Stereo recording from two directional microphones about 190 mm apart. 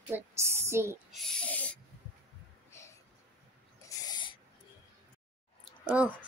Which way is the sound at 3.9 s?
20° left (ahead or behind).